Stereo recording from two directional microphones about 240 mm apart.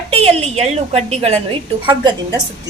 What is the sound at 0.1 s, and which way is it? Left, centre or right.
A woman's voice, right.